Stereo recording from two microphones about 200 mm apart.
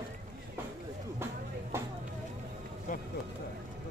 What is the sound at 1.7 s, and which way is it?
Vehicle, 15° right (ahead or behind).